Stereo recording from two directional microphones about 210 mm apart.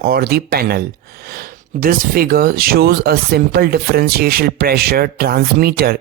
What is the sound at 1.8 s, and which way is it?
Speech, 45° right (ahead or behind).